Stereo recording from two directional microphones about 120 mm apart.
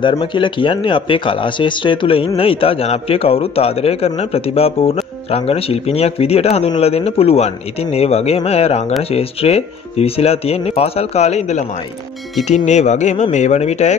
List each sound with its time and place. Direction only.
0.3 s speech: 45° left (ahead or behind); by 13.9 s 70° left (ahead or behind)